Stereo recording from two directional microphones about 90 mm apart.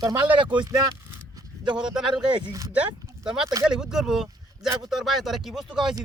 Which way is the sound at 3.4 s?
40° right (ahead or behind).